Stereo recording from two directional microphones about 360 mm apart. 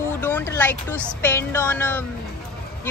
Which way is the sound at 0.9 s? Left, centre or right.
Centre.